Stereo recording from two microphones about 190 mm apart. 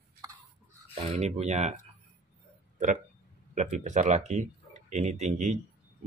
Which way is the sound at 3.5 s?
40° right (ahead or behind).